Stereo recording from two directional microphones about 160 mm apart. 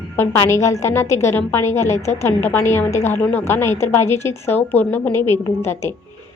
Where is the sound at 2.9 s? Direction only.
45° left (ahead or behind).